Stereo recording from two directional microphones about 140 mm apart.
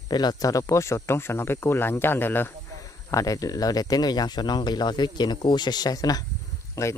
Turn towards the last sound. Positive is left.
turn(degrees=20)  # may be behind; listen again after turning